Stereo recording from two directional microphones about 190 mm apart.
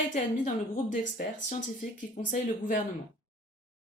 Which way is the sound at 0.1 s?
40° left (ahead or behind).